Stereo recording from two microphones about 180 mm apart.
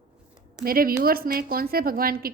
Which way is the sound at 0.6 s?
55° right (ahead or behind).